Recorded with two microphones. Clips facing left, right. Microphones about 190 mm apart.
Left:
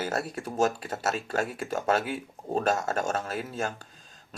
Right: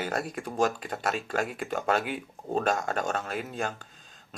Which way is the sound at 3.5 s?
40° left (ahead or behind).